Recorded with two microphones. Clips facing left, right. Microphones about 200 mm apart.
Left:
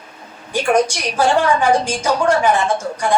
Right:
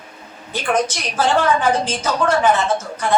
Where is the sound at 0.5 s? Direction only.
10° left (ahead or behind).